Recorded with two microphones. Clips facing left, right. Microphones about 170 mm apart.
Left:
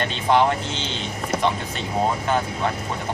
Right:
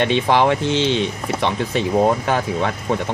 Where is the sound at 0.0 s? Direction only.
75° right (ahead or behind).